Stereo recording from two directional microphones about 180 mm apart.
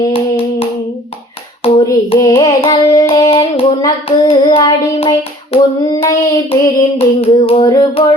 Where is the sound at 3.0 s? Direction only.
30° left (ahead or behind).